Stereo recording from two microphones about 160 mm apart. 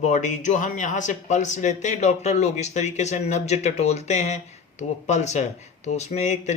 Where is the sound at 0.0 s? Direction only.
50° left (ahead or behind).